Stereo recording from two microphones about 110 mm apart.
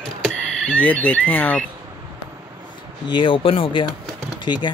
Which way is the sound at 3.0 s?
50° left (ahead or behind).